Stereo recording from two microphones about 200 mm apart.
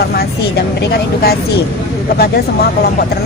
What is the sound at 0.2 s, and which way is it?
A woman's voice, 50° left (ahead or behind).